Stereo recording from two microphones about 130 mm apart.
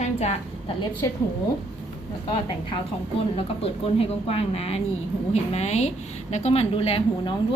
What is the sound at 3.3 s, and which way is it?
A woman's voice, 45° left (ahead or behind).